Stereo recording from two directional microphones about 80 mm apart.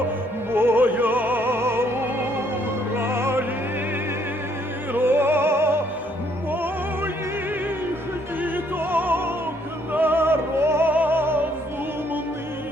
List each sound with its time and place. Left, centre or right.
0.5 s music: right
3.0 s opera: right
4.9 s music: right
6.5 s opera: right
8.4 s opera: right
9.9 s music: right